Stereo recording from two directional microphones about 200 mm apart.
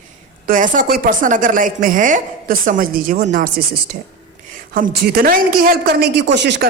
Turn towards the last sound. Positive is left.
turn(degrees=-60)  # may be behind; listen again after turning